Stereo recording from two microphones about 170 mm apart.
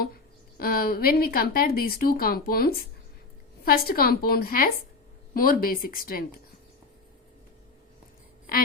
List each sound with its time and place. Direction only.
0.0 s a woman's voice: 65° left (ahead or behind)
8.5 s a woman's voice: 60° left (ahead or behind)